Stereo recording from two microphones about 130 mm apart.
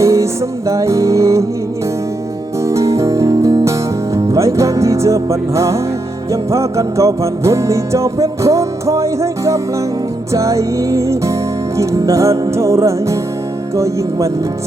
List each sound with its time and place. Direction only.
0.0 s music: 25° right (ahead or behind)
2.6 s music: 25° right (ahead or behind)